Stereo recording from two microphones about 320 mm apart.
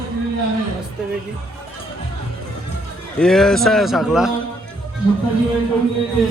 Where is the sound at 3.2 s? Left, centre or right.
Centre.